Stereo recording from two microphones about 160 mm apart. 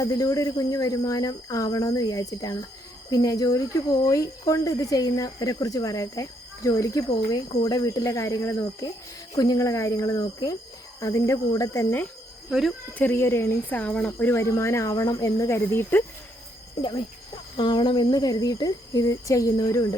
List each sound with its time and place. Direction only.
0.0 s speech: 20° left (ahead or behind)
12.5 s speech: centre (ahead or behind)
12.9 s speech: 10° left (ahead or behind)
17.6 s speech: 30° left (ahead or behind)